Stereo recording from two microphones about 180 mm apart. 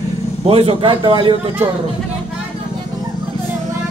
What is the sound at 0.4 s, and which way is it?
A man's voice, 30° right (ahead or behind).